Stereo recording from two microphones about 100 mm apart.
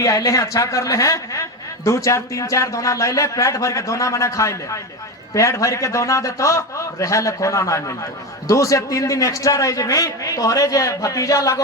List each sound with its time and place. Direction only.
0.0 s a man's voice: 35° left (ahead or behind)